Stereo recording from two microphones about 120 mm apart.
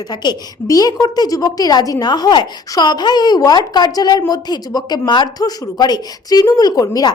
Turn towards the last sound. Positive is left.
turn(degrees=30)  # may be behind; listen again after turning